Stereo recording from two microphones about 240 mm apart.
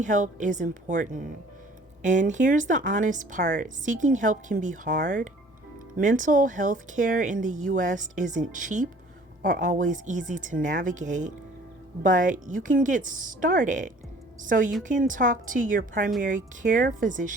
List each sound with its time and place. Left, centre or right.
0.0 s speech: right